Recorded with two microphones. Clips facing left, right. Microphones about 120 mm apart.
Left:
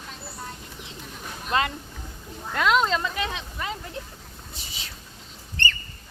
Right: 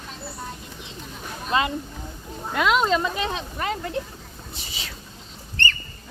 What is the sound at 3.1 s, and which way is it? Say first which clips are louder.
Speech: right 3 dB; 30° right (ahead or behind).